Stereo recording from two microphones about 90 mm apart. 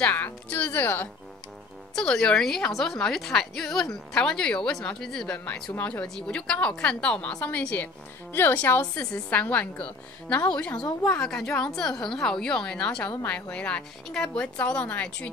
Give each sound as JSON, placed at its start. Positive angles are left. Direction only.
{"t": 0.0, "sound": "a woman's voice", "side_deg": 20}
{"t": 2.0, "sound": "a woman's voice", "side_deg": 10}
{"t": 6.0, "sound": "a woman's voice", "side_deg": 5}